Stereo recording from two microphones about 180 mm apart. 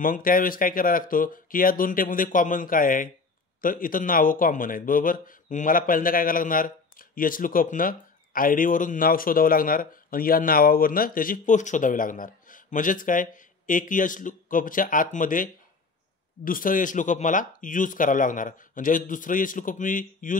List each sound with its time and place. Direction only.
0.0 s a man's voice: 50° left (ahead or behind)